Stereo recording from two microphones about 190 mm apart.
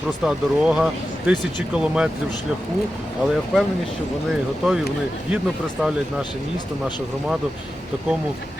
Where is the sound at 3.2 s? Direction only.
Centre (ahead or behind).